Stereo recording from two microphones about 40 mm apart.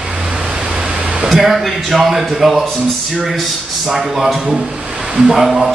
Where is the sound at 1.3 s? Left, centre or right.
Centre.